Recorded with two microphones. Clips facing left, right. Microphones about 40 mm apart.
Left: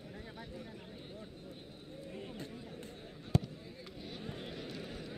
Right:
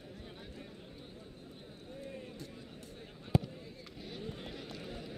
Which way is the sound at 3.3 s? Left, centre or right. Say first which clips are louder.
Right 2 dB; centre.